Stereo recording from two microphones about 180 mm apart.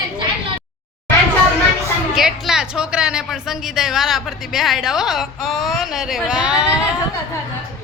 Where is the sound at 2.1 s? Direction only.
Centre (ahead or behind).